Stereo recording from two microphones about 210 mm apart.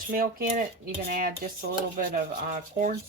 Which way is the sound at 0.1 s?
45° right (ahead or behind).